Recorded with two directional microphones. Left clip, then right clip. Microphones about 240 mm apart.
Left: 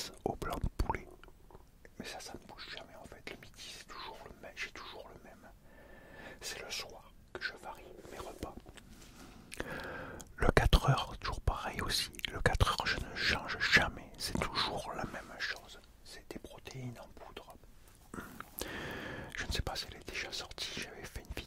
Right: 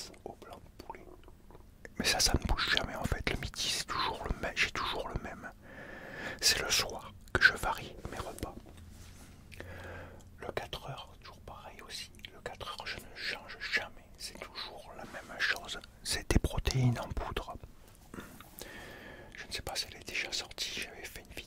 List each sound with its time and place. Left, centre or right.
0.2 s whispering: left
2.3 s whispering: right
6.1 s whispering: right
6.6 s whispering: right
8.1 s whispering: centre
9.6 s whispering: left
9.8 s whispering: left
10.1 s whispering: left
12.8 s whispering: left
15.3 s whispering: centre
16.0 s whispering: right
18.1 s whispering: centre
18.6 s a sound: left
20.1 s whispering: left